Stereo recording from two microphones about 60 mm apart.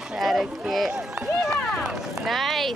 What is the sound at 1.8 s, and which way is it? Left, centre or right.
Run, centre.